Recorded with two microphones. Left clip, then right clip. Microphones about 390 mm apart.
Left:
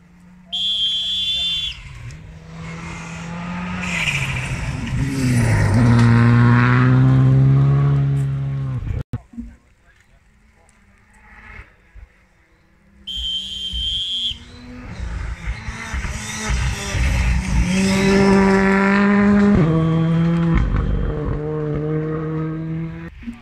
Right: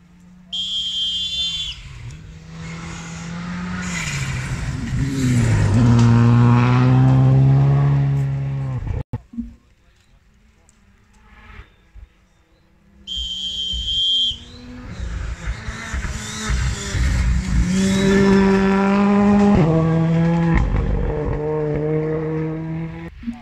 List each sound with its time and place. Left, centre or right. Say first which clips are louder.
0.5 s buzzer: left 4 dB; left
3.4 s vehicle: left 3 dB; centre; by 8.7 s right
13.7 s whistle: right 4 dB; left
15.1 s vehicle: even; centre